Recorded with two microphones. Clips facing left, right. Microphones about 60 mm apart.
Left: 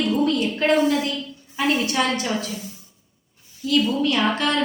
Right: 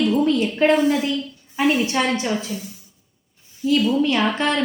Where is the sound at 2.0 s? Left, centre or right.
Centre.